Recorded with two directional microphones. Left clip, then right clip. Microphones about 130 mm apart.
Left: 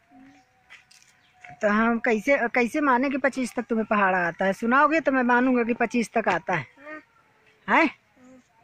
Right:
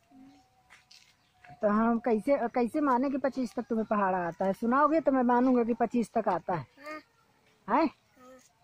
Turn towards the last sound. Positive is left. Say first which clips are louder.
# left 7 dB
turn(degrees=5)  # may be behind; listen again after turning